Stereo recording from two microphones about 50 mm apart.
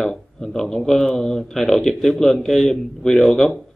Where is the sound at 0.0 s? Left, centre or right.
Centre.